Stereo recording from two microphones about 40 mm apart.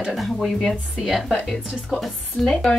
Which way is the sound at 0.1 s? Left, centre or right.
Centre.